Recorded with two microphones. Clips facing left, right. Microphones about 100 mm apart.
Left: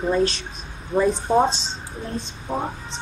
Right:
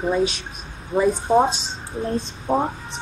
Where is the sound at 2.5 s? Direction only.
35° right (ahead or behind).